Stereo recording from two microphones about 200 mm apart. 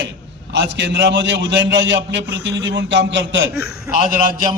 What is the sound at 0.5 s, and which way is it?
A man's voice, 65° right (ahead or behind).